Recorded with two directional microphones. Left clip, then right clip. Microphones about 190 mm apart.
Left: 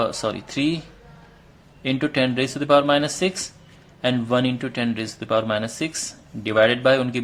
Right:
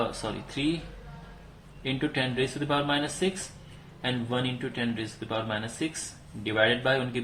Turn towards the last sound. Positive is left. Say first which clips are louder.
# left 8 dB
turn(degrees=60)  # may be behind; listen again after turning